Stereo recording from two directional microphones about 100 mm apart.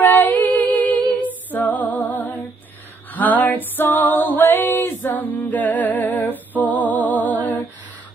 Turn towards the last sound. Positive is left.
turn(degrees=15)  # may be behind; listen again after turning